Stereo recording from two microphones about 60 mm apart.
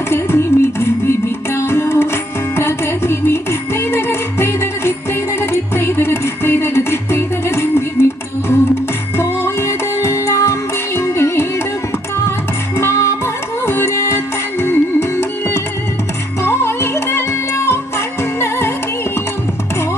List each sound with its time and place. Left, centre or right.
0.1 s music: left
12.7 s music: left